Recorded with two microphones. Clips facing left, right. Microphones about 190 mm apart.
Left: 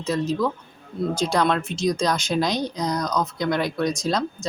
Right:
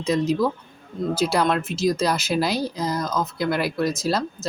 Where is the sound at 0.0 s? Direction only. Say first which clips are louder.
Right 2 dB; 15° right (ahead or behind).